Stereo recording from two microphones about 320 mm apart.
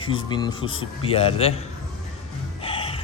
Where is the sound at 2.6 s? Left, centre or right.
Centre.